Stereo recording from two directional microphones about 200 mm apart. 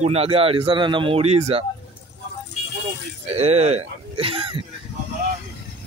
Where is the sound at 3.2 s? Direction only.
30° right (ahead or behind).